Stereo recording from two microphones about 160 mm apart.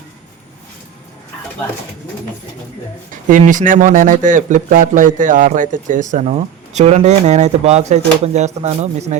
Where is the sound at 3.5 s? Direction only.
55° right (ahead or behind).